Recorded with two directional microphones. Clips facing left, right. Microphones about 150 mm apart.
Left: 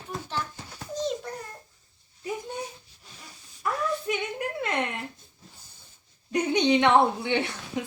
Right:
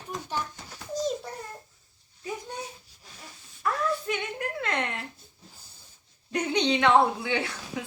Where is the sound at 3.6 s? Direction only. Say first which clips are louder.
Even; 10° left (ahead or behind).